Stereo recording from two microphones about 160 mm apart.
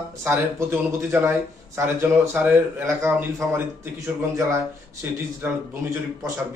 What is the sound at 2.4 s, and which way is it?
Speech, 10° right (ahead or behind).